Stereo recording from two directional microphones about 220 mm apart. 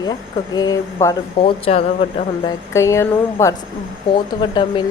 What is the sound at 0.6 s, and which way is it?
Speech, 15° left (ahead or behind).